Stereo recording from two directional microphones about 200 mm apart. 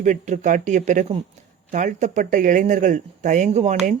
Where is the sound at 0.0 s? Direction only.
40° right (ahead or behind).